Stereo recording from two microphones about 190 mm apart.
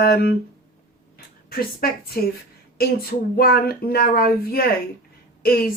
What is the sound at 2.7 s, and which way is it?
Speech, 50° left (ahead or behind).